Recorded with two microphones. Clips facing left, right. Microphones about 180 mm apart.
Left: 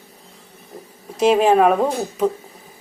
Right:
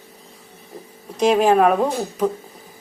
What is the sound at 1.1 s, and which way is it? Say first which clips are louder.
A woman's voice: left 1 dB; 5° left (ahead or behind).